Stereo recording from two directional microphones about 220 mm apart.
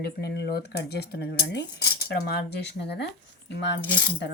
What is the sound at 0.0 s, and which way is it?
Speech, 50° left (ahead or behind).